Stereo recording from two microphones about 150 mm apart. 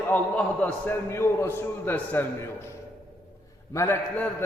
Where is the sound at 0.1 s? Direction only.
10° left (ahead or behind).